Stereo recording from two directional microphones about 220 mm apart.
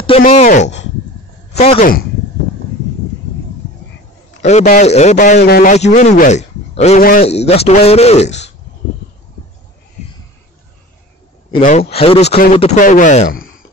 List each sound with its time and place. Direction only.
0.3 s a man's voice: 30° left (ahead or behind)
1.8 s a man's voice: 40° left (ahead or behind)
4.4 s a man's voice: 30° left (ahead or behind)
5.4 s a man's voice: 40° left (ahead or behind)
7.0 s speech: 40° left (ahead or behind)
7.2 s a man's voice: 30° left (ahead or behind)
8.3 s speech: 55° left (ahead or behind)
11.6 s a man's voice: 35° left (ahead or behind)